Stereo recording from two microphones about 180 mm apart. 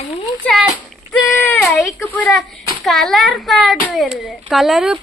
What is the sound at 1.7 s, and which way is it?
Speech, 15° left (ahead or behind).